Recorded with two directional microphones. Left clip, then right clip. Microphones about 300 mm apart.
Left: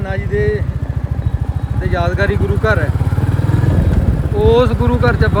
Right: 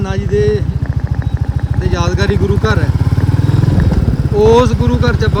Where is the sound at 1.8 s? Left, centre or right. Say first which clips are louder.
Even; centre.